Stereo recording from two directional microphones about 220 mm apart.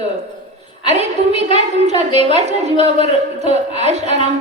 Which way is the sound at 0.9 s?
30° right (ahead or behind).